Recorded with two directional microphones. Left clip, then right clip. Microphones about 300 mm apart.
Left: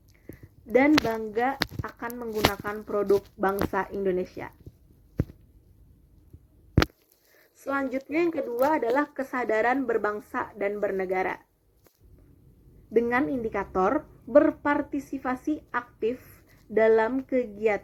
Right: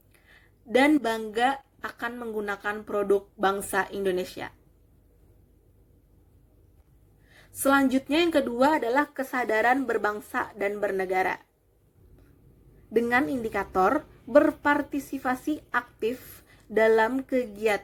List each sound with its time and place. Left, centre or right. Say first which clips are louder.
0.7 s a woman's voice: left 1 dB; right
7.7 s a woman's voice: right 6 dB; right
12.9 s a woman's voice: even; right